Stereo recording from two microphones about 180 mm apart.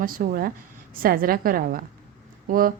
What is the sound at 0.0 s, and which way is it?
Speech, 50° right (ahead or behind).